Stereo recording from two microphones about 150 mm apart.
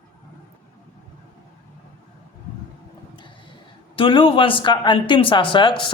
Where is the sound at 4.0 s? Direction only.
35° left (ahead or behind).